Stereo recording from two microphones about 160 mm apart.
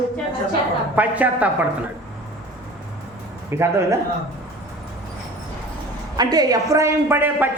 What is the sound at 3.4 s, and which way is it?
Speech, 15° right (ahead or behind).